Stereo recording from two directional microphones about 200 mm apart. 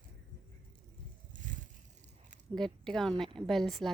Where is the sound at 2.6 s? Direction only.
5° left (ahead or behind).